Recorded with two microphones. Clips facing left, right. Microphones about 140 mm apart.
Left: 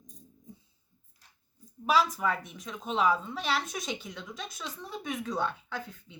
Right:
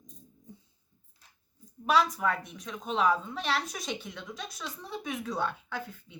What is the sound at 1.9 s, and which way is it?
A woman's voice, 5° left (ahead or behind).